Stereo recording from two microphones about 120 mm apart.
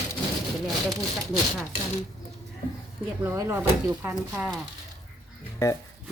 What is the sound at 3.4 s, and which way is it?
Speech, 20° right (ahead or behind).